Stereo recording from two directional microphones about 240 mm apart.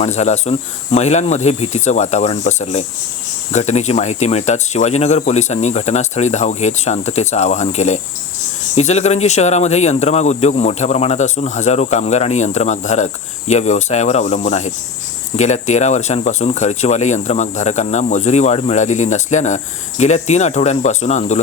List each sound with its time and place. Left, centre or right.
0.0 s speech: left